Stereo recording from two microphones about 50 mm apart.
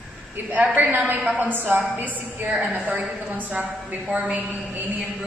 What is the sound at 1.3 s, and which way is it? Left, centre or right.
A woman's voice, right.